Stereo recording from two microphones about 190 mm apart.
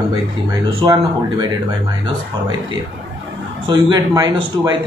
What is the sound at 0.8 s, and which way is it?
Speech, 25° right (ahead or behind).